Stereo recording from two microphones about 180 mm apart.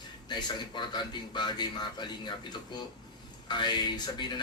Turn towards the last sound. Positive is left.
turn(degrees=25)  # may be behind; listen again after turning